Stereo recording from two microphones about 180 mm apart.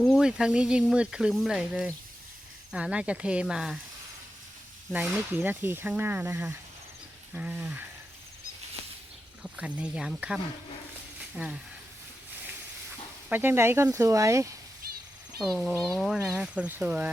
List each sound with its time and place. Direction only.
0.0 s speech: centre (ahead or behind)
4.9 s speech: 5° right (ahead or behind)
9.4 s speech: 5° right (ahead or behind)
13.3 s speech: 10° right (ahead or behind)
15.4 s speech: centre (ahead or behind)